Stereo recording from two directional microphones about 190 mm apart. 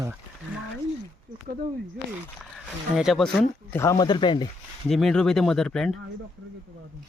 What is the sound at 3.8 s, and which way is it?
Speech, 20° left (ahead or behind).